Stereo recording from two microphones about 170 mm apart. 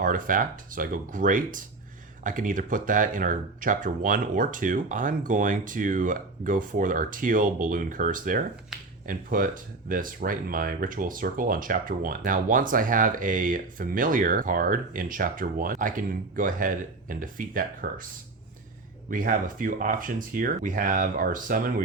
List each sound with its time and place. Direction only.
0.0 s speech: 50° right (ahead or behind)
19.1 s speech: 50° right (ahead or behind)